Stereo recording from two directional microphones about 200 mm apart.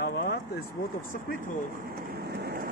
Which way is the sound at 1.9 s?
50° right (ahead or behind).